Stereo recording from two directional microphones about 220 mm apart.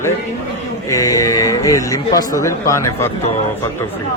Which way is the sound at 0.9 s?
15° left (ahead or behind).